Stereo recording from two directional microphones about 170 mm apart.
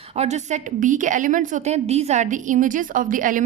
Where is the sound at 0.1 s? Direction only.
40° right (ahead or behind).